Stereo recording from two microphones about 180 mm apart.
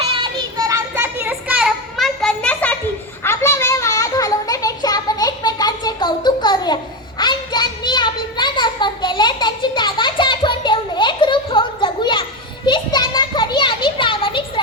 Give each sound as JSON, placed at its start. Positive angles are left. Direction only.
{"t": 0.0, "sound": "child singing", "side_deg": -25}
{"t": 3.2, "sound": "a sound", "side_deg": 15}
{"t": 12.6, "sound": "children playing", "side_deg": 25}